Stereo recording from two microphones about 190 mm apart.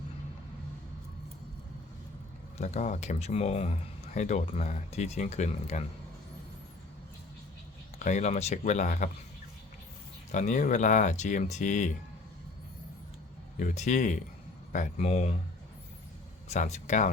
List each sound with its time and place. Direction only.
2.6 s speech: 35° left (ahead or behind)
7.9 s speech: 40° left (ahead or behind)
10.3 s speech: 40° left (ahead or behind)
13.6 s speech: 40° left (ahead or behind)
16.5 s speech: 35° left (ahead or behind)